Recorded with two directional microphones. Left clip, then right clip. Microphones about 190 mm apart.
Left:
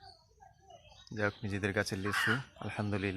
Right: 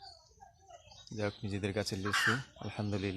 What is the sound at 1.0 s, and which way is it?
Speech, 5° left (ahead or behind).